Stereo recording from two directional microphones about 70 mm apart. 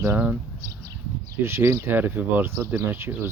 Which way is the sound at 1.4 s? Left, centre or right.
Right.